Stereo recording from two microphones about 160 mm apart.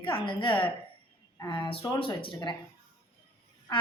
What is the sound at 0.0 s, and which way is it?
Speech, 35° left (ahead or behind).